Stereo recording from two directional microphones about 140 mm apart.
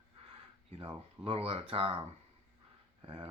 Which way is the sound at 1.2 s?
45° right (ahead or behind).